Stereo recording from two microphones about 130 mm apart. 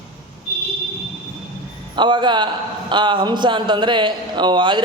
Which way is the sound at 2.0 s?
35° right (ahead or behind).